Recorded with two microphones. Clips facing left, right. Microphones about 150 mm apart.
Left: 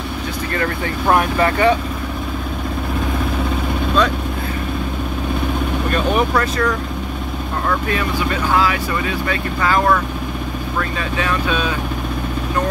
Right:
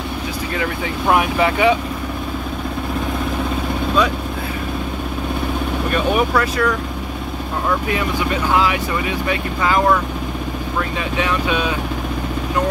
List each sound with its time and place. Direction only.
0.6 s speech: 5° right (ahead or behind)
7.9 s speech: 20° right (ahead or behind)
11.1 s speech: 15° right (ahead or behind)